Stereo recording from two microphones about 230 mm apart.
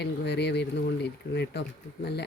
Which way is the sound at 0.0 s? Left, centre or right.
Left.